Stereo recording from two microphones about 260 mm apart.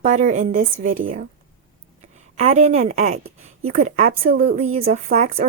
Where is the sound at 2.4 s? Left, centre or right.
Right.